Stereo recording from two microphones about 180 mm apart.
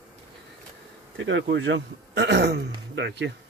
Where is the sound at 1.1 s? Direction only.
90° right; by 3.3 s 75° right (ahead or behind).